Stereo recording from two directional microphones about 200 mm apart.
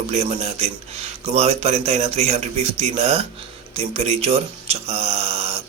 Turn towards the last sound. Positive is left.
turn(degrees=-30)  # may be behind; listen again after turning